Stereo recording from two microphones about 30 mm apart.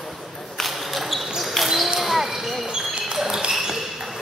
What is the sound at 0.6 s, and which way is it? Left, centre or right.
Basketball bounce, centre.